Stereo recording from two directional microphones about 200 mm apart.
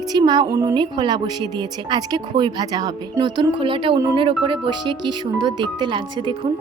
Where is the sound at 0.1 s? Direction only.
20° right (ahead or behind).